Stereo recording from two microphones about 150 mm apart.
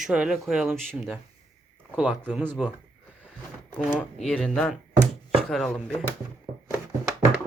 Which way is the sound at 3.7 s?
10° left (ahead or behind).